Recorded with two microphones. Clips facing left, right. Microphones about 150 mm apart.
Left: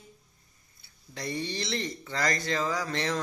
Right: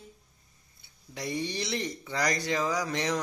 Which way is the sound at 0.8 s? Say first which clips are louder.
Even; 15° right (ahead or behind).